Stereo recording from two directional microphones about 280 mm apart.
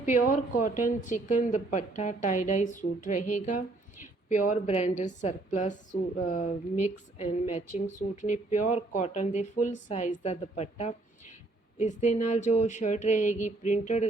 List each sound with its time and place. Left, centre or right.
0.1 s a woman's voice: left